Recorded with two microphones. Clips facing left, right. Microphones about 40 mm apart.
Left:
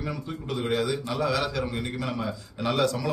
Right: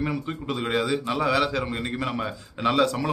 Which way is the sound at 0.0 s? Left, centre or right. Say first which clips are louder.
Right 5 dB; right.